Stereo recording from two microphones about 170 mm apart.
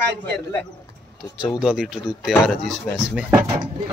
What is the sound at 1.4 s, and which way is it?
Speech, 5° right (ahead or behind).